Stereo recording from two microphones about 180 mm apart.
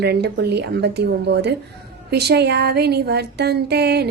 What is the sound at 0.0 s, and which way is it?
A woman's voice, 65° right (ahead or behind).